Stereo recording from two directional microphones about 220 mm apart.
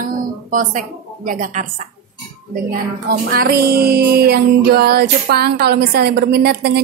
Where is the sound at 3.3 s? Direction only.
45° right (ahead or behind).